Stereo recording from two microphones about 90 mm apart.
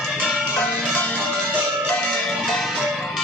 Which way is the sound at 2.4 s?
5° left (ahead or behind).